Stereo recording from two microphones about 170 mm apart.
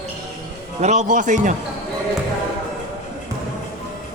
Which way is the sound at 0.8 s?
45° right (ahead or behind).